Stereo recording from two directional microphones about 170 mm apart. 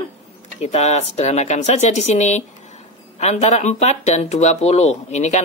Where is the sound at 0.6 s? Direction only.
40° left (ahead or behind).